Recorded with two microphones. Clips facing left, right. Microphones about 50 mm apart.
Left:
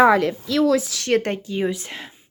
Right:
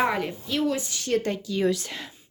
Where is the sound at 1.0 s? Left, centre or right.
Left.